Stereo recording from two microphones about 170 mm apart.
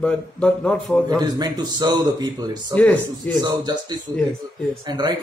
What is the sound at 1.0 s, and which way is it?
Speech, 25° right (ahead or behind).